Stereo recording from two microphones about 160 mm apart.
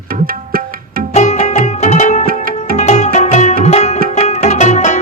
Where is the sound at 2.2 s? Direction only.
65° right (ahead or behind).